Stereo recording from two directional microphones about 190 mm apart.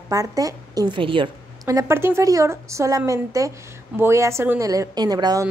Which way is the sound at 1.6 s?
15° right (ahead or behind).